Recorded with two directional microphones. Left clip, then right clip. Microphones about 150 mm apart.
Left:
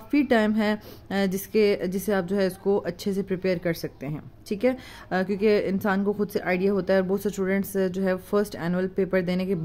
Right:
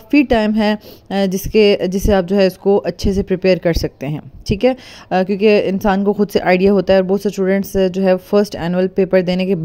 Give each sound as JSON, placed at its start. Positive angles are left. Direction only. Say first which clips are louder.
{"t": 0.1, "sound": "a woman's voice", "louder": "right 8 dB", "side_deg": -40}